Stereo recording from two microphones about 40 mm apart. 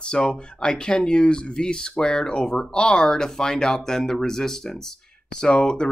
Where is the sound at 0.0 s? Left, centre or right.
Left.